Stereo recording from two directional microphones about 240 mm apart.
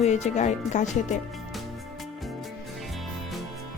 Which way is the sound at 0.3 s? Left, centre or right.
Left.